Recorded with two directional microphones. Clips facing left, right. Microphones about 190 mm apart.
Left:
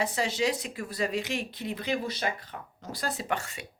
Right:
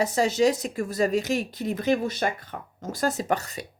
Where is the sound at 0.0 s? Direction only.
45° right (ahead or behind).